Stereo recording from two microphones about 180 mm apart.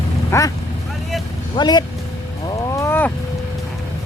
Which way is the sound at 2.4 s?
15° left (ahead or behind).